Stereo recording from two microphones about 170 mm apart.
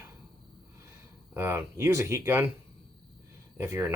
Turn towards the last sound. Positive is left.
turn(degrees=-15)  # may be behind; listen again after turning